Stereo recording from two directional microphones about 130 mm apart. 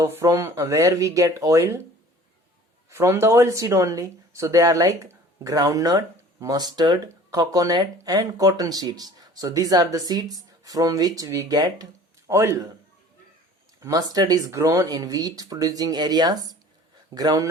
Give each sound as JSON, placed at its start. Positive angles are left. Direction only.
{"t": 0.0, "sound": "speech", "side_deg": -20}
{"t": 2.9, "sound": "speech", "side_deg": -20}
{"t": 13.7, "sound": "speech", "side_deg": -25}